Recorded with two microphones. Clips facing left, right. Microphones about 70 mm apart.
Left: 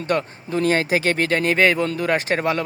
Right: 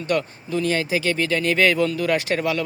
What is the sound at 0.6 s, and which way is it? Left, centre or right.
Speech, left.